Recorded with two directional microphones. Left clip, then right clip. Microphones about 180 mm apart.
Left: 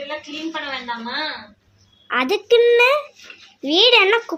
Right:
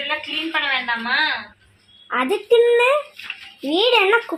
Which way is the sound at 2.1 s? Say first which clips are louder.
Left 1 dB; 15° left (ahead or behind).